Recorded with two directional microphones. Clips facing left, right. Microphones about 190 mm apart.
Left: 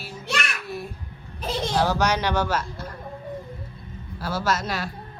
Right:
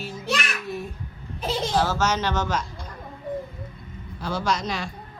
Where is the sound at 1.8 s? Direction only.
15° left (ahead or behind).